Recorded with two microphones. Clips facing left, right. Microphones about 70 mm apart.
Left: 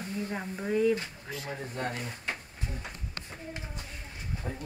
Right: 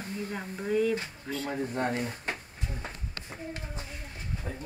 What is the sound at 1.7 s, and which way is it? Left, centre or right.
Speech, right.